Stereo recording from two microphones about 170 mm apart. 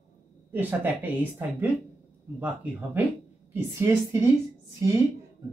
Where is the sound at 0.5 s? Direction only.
10° right (ahead or behind).